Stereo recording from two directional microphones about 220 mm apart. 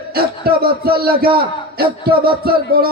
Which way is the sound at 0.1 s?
45° right (ahead or behind).